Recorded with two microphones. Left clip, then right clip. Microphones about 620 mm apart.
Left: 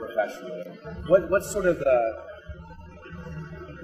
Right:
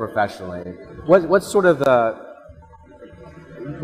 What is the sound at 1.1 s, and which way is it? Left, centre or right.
Speech, right.